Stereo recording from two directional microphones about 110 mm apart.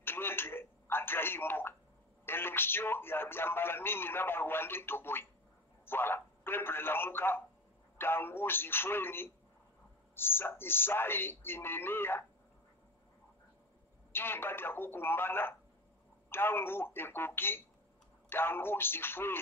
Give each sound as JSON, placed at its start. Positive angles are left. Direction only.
{"t": 0.0, "sound": "a man's voice", "side_deg": 20}
{"t": 14.1, "sound": "a man's voice", "side_deg": 20}